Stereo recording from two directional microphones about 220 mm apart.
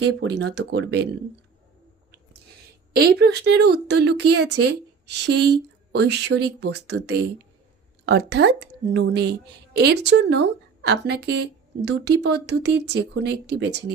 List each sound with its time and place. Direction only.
0.0 s speech: 55° right (ahead or behind)
2.9 s speech: 45° right (ahead or behind)